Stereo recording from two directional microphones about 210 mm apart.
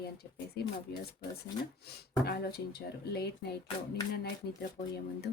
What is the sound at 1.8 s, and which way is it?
Speech, 50° left (ahead or behind).